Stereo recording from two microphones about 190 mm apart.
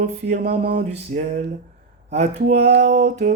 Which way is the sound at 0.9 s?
35° right (ahead or behind).